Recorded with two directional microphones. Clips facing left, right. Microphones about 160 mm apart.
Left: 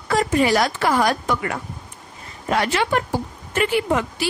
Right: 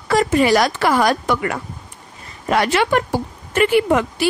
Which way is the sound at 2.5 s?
70° right (ahead or behind).